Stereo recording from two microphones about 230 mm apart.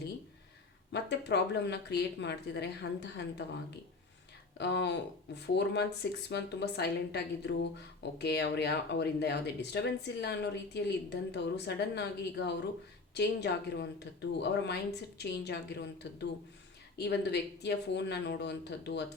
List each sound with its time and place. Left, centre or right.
0.9 s speech: left
4.5 s speech: left